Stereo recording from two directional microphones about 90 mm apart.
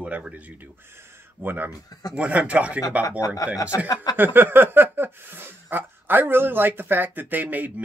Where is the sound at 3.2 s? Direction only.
40° left (ahead or behind).